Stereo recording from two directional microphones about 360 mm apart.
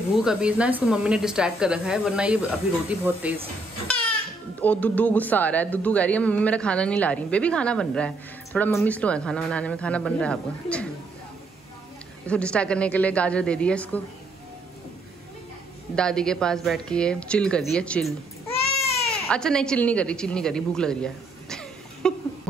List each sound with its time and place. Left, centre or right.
0.1 s speech: centre
4.6 s speech: centre
12.3 s speech: centre
16.0 s speech: centre
18.5 s baby cry: centre
19.2 s a woman's voice: centre